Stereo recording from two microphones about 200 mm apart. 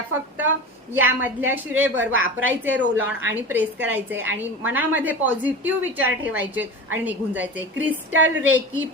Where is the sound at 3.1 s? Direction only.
80° right.